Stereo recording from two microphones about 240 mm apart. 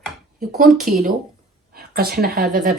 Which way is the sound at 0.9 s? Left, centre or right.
Right.